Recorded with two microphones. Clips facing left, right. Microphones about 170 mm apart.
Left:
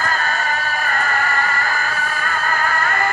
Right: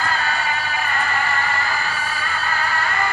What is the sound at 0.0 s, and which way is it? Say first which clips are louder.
Music: left 1 dB; 45° left (ahead or behind).